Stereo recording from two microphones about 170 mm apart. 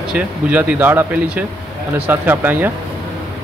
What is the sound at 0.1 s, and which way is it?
Speech, 10° right (ahead or behind).